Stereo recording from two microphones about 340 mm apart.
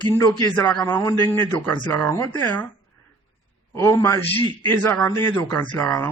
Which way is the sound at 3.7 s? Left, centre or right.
Centre.